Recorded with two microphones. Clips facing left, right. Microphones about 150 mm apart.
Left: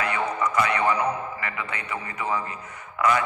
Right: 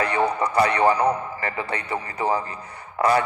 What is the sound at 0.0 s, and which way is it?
A man's voice, 35° right (ahead or behind).